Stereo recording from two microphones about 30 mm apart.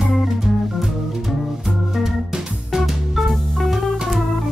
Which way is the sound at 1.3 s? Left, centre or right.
Centre.